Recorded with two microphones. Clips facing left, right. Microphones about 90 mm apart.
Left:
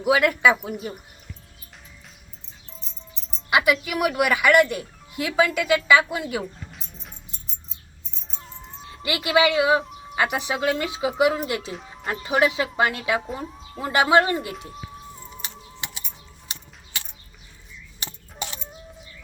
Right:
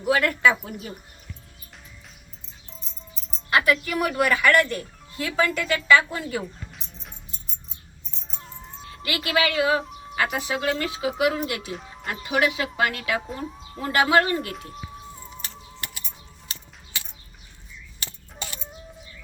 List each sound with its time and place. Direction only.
0.0 s speech: 10° left (ahead or behind)
3.5 s speech: 10° left (ahead or behind)
6.7 s music: centre (ahead or behind)
8.3 s music: centre (ahead or behind)
8.9 s speech: 20° left (ahead or behind)
11.7 s music: centre (ahead or behind)
12.2 s speech: 25° left (ahead or behind)
13.2 s speech: centre (ahead or behind)
13.8 s speech: 20° left (ahead or behind)
15.1 s music: centre (ahead or behind)